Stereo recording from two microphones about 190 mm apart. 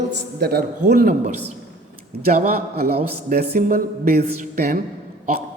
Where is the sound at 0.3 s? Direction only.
55° right (ahead or behind).